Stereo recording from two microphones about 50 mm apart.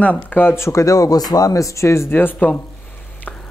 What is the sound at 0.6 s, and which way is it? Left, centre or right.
Speech, left.